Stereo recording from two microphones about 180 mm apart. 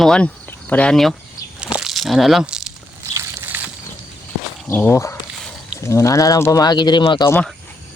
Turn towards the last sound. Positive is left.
turn(degrees=25)  # may be behind; listen again after turning